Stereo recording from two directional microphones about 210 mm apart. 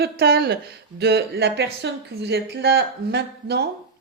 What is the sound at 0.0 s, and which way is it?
A woman's voice, 50° right (ahead or behind).